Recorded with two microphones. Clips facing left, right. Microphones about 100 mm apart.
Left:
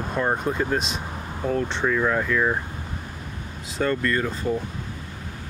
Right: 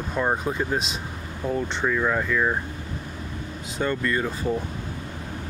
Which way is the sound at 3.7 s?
5° right (ahead or behind).